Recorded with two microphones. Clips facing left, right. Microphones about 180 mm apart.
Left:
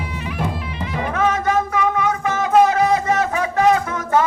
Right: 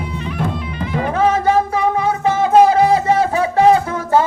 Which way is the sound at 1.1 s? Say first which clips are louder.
Right 4 dB; 30° right (ahead or behind).